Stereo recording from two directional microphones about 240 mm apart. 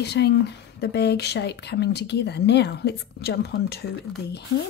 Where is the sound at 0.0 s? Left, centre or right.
Left.